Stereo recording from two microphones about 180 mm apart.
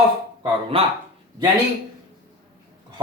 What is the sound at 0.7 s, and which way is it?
Speech, 30° right (ahead or behind).